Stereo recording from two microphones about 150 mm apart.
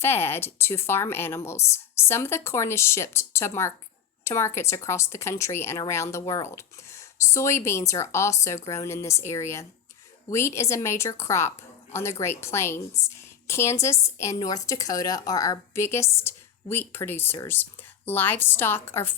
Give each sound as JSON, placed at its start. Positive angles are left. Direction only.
{"t": 0.0, "sound": "a woman's voice", "side_deg": 15}